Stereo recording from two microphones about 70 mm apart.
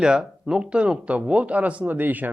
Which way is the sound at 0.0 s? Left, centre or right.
Centre.